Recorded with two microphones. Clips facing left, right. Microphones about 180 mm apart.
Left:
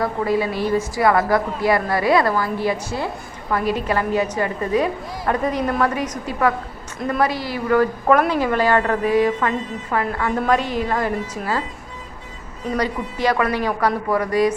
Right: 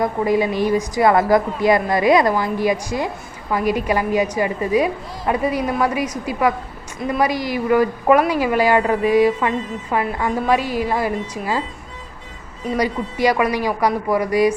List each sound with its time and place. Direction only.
0.0 s a woman's voice: 15° right (ahead or behind)
12.7 s a woman's voice: 10° right (ahead or behind)